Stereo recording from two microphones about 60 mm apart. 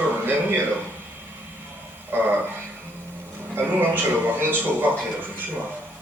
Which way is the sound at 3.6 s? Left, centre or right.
Right.